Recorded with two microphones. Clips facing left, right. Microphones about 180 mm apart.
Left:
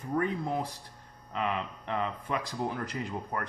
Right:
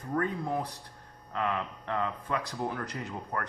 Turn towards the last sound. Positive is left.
turn(degrees=20)  # may be behind; listen again after turning